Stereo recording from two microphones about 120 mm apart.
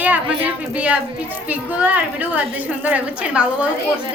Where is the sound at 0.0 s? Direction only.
15° right (ahead or behind).